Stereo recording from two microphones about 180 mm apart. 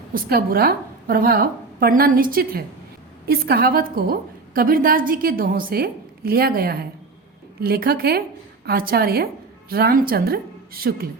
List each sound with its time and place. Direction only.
0.1 s a woman's voice: 55° right (ahead or behind)